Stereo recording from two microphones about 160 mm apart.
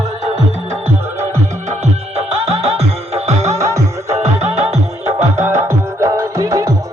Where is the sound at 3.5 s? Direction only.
20° right (ahead or behind).